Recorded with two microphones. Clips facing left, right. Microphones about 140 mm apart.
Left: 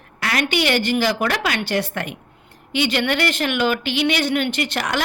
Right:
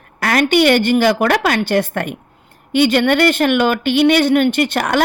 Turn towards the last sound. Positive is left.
turn(degrees=-50)  # may be behind; listen again after turning